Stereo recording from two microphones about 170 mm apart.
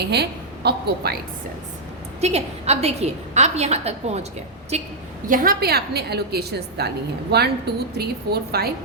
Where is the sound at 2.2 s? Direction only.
40° right (ahead or behind).